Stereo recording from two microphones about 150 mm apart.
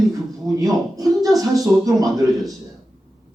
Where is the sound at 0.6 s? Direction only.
25° right (ahead or behind).